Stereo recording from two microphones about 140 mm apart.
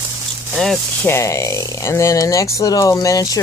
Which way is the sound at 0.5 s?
Centre (ahead or behind).